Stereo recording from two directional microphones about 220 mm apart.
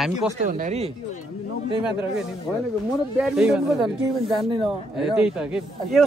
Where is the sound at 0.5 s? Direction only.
35° right (ahead or behind).